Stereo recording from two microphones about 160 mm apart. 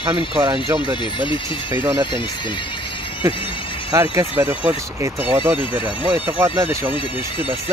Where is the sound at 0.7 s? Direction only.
30° left (ahead or behind).